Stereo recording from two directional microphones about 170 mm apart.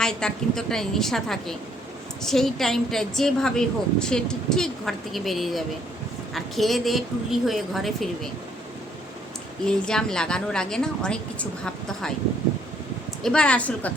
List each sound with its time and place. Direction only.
0.0 s a woman's voice: 5° left (ahead or behind)
9.6 s a woman's voice: 5° left (ahead or behind)
13.2 s a woman's voice: 5° left (ahead or behind)